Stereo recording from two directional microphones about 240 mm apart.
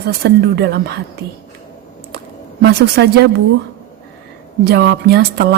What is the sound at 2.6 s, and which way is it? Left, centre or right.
Speech, right.